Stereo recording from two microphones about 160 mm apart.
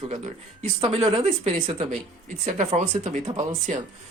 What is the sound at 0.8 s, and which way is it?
Speech, 40° right (ahead or behind).